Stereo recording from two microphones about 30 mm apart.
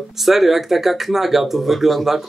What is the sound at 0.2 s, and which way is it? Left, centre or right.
A man's voice, centre.